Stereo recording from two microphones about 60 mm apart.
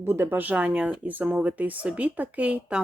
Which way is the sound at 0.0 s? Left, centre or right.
Right.